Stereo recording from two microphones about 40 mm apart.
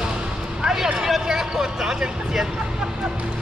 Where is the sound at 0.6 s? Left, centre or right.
Centre.